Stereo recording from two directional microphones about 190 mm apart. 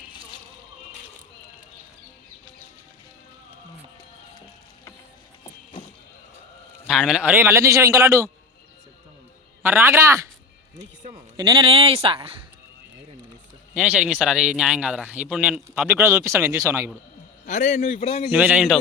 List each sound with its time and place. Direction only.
6.8 s a man's voice: centre (ahead or behind)
9.6 s a man's voice: 10° right (ahead or behind)
11.3 s speech: 25° right (ahead or behind)
13.7 s a man's voice: 5° right (ahead or behind)
17.4 s a man's voice: 40° left (ahead or behind)
18.3 s a man's voice: 10° right (ahead or behind)